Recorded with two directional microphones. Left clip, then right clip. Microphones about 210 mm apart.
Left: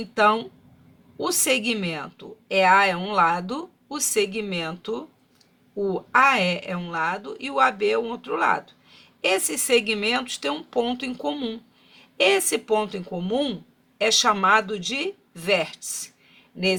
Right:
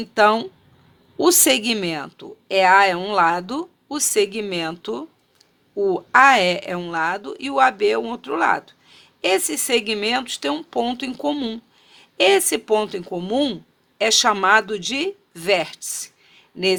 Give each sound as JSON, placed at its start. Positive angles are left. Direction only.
{"t": 0.1, "sound": "speech", "side_deg": -45}